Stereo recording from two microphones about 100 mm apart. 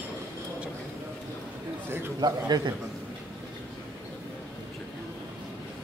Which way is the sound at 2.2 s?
45° right (ahead or behind).